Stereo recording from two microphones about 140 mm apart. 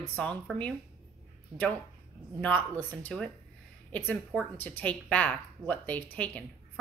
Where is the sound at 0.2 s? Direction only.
5° left (ahead or behind).